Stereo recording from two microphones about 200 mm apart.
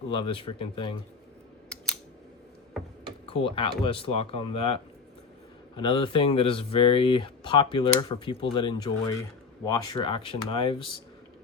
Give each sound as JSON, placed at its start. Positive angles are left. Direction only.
{"t": 0.1, "sound": "speech", "side_deg": 25}
{"t": 3.2, "sound": "speech", "side_deg": 30}